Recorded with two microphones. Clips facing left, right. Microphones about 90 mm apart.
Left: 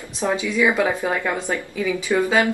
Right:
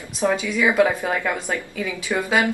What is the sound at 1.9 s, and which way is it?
Speech, 15° right (ahead or behind).